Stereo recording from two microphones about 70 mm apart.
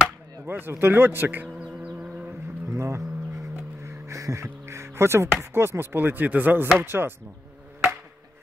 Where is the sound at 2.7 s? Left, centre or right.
Right.